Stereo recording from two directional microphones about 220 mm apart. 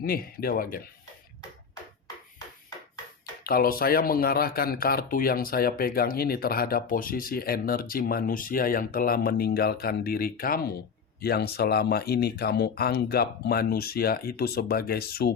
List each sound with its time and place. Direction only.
0.0 s speech: 40° left (ahead or behind)
3.4 s speech: 40° left (ahead or behind)